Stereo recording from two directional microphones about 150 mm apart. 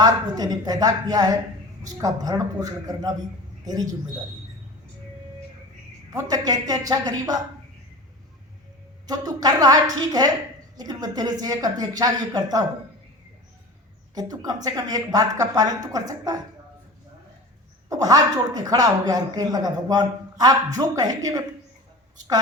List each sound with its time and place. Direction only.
0.0 s speech: 25° right (ahead or behind)
6.1 s speech: 25° right (ahead or behind)
9.0 s speech: 25° right (ahead or behind)
14.2 s speech: 25° right (ahead or behind)
17.8 s speech: 25° right (ahead or behind)